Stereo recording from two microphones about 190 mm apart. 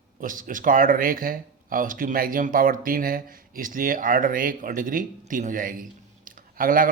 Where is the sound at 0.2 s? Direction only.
45° right (ahead or behind).